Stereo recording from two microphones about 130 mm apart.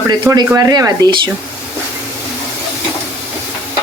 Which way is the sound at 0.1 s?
30° right (ahead or behind).